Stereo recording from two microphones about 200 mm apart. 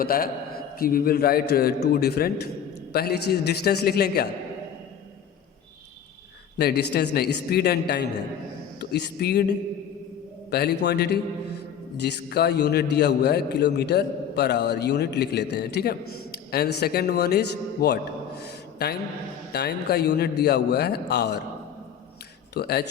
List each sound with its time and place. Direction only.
0.0 s a man's voice: 45° left (ahead or behind)
6.6 s a man's voice: 55° left (ahead or behind)
22.5 s a man's voice: 55° left (ahead or behind)